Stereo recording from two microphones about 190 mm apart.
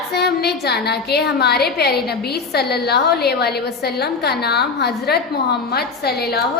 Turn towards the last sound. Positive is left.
turn(degrees=55)  # may be behind; listen again after turning